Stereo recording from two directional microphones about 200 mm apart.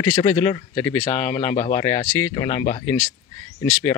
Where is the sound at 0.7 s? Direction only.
10° left (ahead or behind).